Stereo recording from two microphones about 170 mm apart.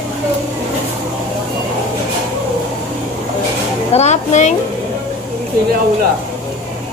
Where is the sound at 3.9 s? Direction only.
40° left (ahead or behind).